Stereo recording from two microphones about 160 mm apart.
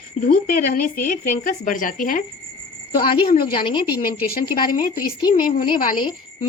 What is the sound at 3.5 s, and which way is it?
Speech, 30° left (ahead or behind).